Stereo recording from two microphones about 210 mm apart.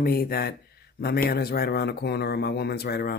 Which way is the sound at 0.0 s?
45° left (ahead or behind).